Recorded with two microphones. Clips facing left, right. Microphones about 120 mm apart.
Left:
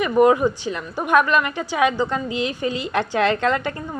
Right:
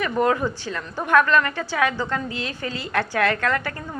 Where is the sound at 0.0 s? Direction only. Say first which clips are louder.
Left 6 dB; 15° left (ahead or behind).